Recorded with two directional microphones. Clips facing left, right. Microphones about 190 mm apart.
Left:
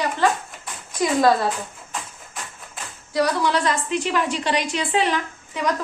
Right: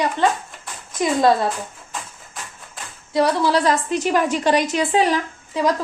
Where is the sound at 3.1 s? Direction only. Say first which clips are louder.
Right 3 dB; 30° right (ahead or behind).